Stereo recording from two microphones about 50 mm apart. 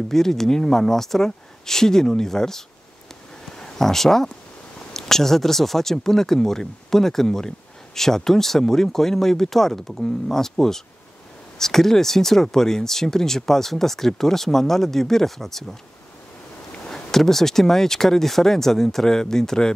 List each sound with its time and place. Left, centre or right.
0.1 s speech: centre
16.9 s speech: centre